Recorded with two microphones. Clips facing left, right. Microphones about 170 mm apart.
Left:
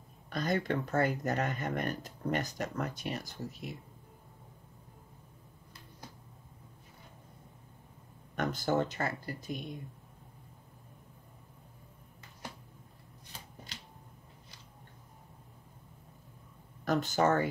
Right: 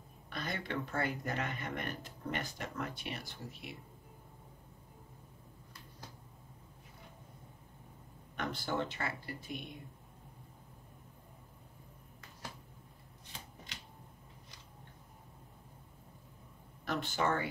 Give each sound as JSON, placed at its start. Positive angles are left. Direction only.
{"t": 0.3, "sound": "speech", "side_deg": 40}
{"t": 8.4, "sound": "speech", "side_deg": 45}
{"t": 16.8, "sound": "speech", "side_deg": 40}